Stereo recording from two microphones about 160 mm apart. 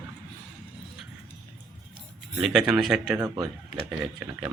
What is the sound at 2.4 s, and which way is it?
Speech, centre (ahead or behind).